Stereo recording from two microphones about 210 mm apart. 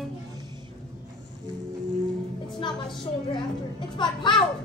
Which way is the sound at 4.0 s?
20° left (ahead or behind).